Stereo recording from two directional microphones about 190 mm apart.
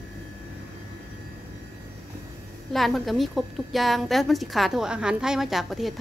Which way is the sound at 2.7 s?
Centre (ahead or behind).